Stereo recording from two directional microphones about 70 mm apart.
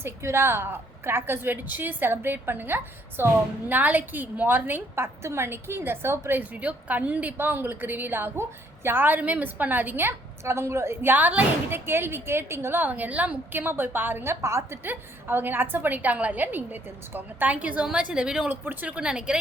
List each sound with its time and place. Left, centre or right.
0.0 s a woman's voice: right
14.4 s a woman's voice: right
14.8 s a woman's voice: right; by 18.4 s centre
18.4 s a woman's voice: right